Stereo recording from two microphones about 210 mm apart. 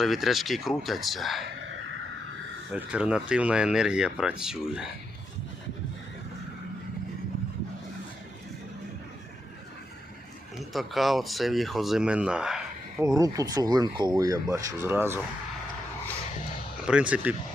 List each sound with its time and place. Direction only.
0.0 s speech: centre (ahead or behind)
2.7 s speech: 5° right (ahead or behind)
10.6 s speech: centre (ahead or behind)
13.1 s speech: 15° right (ahead or behind)
16.8 s speech: 5° right (ahead or behind)